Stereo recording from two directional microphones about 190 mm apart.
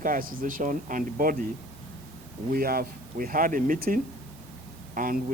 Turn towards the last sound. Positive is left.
turn(degrees=-45)  # may be behind; listen again after turning